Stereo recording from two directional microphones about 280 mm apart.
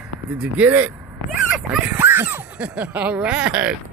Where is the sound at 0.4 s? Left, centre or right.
Centre.